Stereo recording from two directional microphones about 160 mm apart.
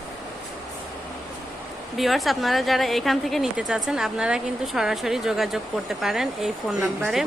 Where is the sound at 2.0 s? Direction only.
Centre (ahead or behind).